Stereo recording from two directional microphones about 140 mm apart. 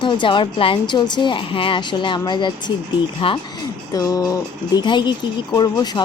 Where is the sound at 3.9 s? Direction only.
25° left (ahead or behind).